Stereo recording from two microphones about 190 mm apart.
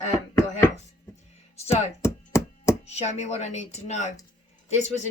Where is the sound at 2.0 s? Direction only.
15° left (ahead or behind).